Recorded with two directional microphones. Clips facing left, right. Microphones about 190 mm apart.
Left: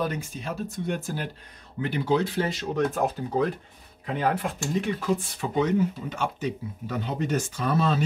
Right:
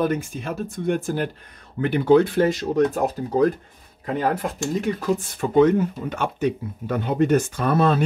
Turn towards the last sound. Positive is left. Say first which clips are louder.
# right 5 dB
turn(degrees=-55)  # may be behind; listen again after turning